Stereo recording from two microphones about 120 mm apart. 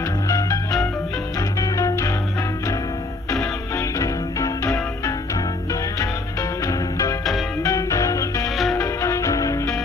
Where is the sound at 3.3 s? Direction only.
25° left (ahead or behind).